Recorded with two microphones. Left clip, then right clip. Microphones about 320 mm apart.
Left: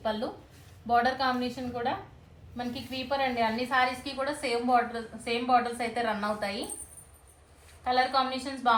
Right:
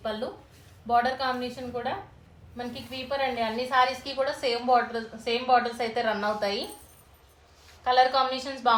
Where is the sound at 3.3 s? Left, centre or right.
Right.